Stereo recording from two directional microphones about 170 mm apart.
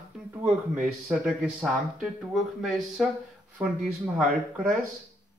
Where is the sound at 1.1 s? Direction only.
5° right (ahead or behind).